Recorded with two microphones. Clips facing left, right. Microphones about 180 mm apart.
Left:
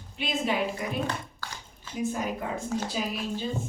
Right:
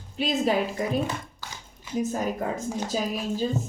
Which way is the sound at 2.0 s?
40° right (ahead or behind).